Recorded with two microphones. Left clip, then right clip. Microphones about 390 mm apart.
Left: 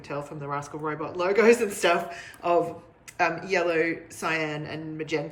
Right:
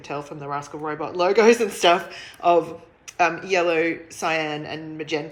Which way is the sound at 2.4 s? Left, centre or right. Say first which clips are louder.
Right 5 dB; centre.